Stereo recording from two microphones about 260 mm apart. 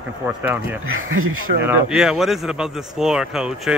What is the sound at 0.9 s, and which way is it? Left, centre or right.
Speech, right.